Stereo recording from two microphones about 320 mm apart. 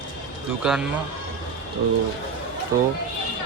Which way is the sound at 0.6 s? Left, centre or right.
Centre.